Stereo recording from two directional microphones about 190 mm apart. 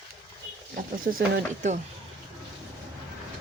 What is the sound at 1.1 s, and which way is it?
Speech, 50° right (ahead or behind).